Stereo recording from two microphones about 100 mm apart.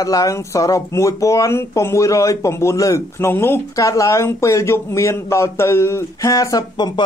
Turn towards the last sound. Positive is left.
turn(degrees=40)  # may be behind; listen again after turning